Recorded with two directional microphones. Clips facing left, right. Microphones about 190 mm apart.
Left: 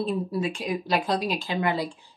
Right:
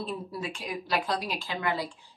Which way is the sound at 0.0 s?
20° left (ahead or behind).